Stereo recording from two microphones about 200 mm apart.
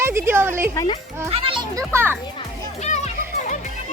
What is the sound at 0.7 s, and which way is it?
Speech, 20° left (ahead or behind).